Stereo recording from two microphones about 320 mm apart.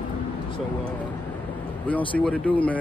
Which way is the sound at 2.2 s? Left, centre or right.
Centre.